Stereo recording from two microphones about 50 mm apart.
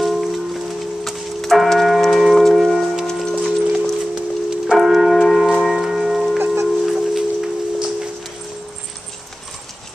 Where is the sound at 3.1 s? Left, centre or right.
Centre.